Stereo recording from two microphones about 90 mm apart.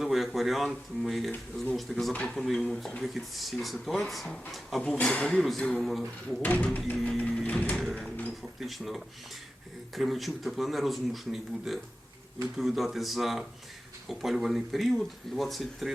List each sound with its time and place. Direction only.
0.0 s speech: 5° right (ahead or behind)
6.2 s speech: 20° left (ahead or behind)
7.9 s a sound: 15° left (ahead or behind)
8.6 s speech: centre (ahead or behind)